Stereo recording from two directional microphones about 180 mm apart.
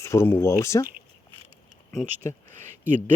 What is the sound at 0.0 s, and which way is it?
Speech, 15° left (ahead or behind).